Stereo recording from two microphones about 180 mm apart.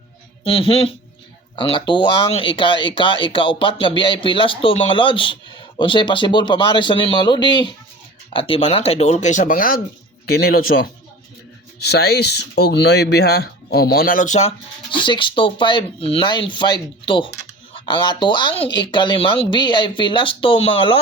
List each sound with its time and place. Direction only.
0.4 s speech: 30° left (ahead or behind)
14.9 s speech: 25° left (ahead or behind)